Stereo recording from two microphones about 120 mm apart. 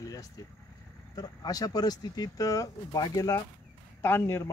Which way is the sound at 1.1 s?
35° left (ahead or behind).